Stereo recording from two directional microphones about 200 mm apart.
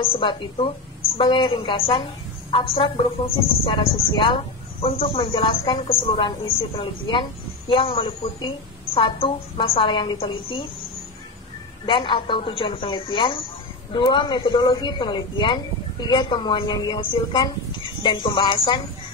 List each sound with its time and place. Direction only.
0.0 s speech: 25° left (ahead or behind)
11.8 s speech: 25° left (ahead or behind)